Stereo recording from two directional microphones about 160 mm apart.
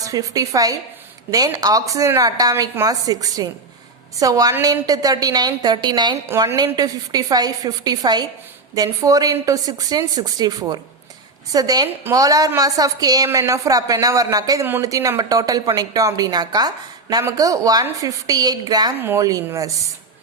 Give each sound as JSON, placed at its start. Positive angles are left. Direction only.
{"t": 0.0, "sound": "a woman's voice", "side_deg": -20}
{"t": 6.2, "sound": "a woman's voice", "side_deg": -15}